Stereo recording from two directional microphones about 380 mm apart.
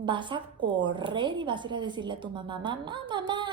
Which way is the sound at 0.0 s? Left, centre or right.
Centre.